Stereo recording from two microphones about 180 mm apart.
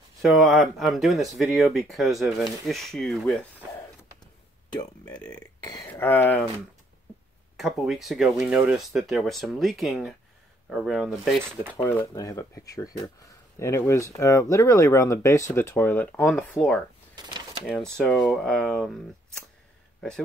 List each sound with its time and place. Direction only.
0.2 s speech: centre (ahead or behind)
4.7 s speech: 20° left (ahead or behind)
5.9 s speech: 10° left (ahead or behind)
7.5 s speech: centre (ahead or behind)
17.1 s drawer open or close: 25° right (ahead or behind)
17.6 s speech: 5° left (ahead or behind)